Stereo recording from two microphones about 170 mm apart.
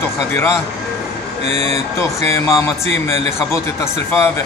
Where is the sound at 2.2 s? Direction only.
15° left (ahead or behind).